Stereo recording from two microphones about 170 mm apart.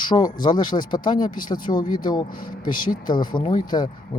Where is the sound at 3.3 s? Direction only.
25° left (ahead or behind).